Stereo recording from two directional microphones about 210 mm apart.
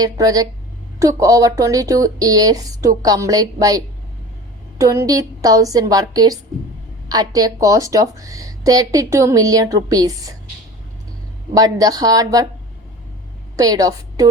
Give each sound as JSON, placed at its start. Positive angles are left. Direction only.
{"t": 0.0, "sound": "speech", "side_deg": -15}
{"t": 11.5, "sound": "speech", "side_deg": -15}
{"t": 13.6, "sound": "a woman's voice", "side_deg": -15}